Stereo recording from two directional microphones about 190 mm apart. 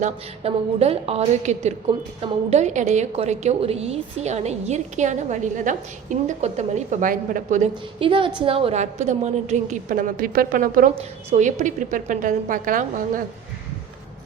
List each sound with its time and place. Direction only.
0.0 s a woman's voice: 30° right (ahead or behind)
7.9 s a woman's voice: 30° right (ahead or behind); by 13.2 s 45° right (ahead or behind)